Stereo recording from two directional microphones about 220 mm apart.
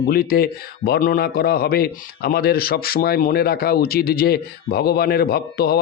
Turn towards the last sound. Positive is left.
turn(degrees=45)  # may be behind; listen again after turning